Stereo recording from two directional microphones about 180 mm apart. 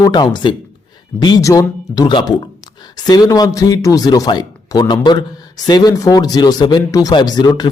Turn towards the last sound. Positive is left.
turn(degrees=25)  # may be behind; listen again after turning